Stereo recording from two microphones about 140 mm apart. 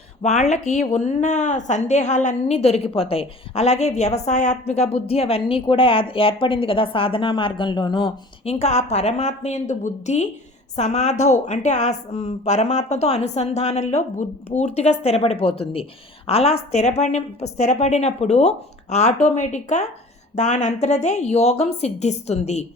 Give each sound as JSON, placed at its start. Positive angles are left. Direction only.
{"t": 0.2, "sound": "speech", "side_deg": 55}
{"t": 8.4, "sound": "speech", "side_deg": 50}